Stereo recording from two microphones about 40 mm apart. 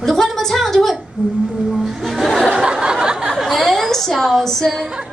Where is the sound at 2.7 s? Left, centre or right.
Right.